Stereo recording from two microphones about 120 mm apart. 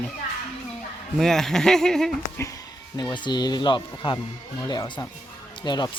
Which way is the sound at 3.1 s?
40° left (ahead or behind).